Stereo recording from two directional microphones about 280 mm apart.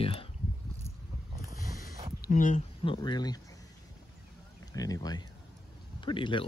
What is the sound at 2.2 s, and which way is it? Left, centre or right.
Speech, left.